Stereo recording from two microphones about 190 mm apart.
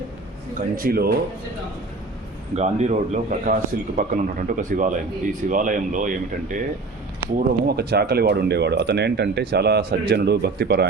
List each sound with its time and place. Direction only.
0.8 s a man's voice: 50° right (ahead or behind)
2.6 s a man's voice: 35° right (ahead or behind)
7.3 s speech: 55° right (ahead or behind)